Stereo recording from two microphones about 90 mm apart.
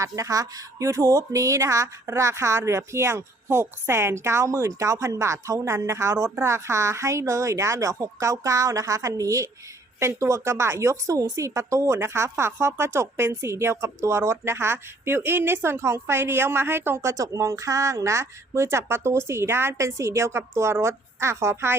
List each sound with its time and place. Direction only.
0.0 s a woman's voice: 40° right (ahead or behind)